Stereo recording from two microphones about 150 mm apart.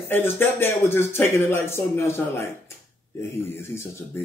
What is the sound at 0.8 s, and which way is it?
A man's voice, 15° left (ahead or behind).